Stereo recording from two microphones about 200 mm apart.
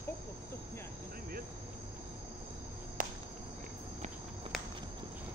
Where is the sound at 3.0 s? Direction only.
45° right (ahead or behind).